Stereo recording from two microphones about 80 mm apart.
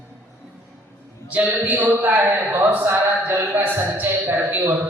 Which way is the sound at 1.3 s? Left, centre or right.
Centre.